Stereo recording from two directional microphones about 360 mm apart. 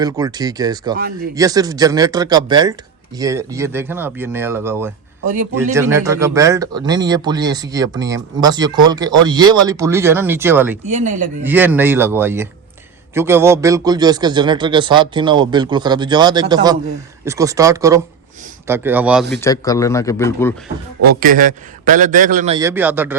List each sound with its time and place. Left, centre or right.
0.0 s a man's voice: centre
5.2 s a man's voice: right
5.7 s a man's voice: centre
10.8 s a man's voice: centre
11.4 s a man's voice: centre
19.3 s speech: centre
21.1 s a man's voice: right; by 23.1 s centre